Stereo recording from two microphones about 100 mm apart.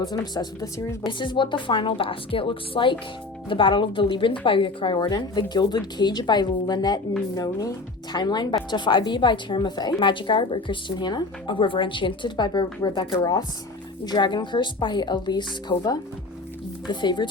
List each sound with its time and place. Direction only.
0.0 s speech: 40° left (ahead or behind)
1.0 s a woman's voice: 50° left (ahead or behind)